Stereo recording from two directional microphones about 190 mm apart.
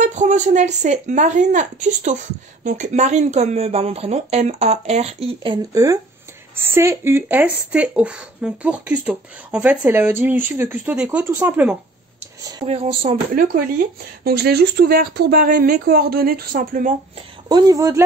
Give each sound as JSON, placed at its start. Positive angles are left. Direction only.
{"t": 0.0, "sound": "speech", "side_deg": -40}
{"t": 12.6, "sound": "speech", "side_deg": -30}
{"t": 14.2, "sound": "speech", "side_deg": -55}
{"t": 17.5, "sound": "speech", "side_deg": -20}